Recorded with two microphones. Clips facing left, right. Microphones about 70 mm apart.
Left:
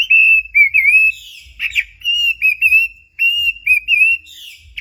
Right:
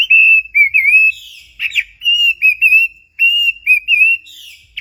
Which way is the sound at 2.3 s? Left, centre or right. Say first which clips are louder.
Right 1 dB; left.